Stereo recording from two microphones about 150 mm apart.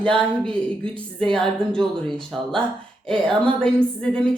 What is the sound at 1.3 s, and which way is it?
A woman's voice, 5° left (ahead or behind).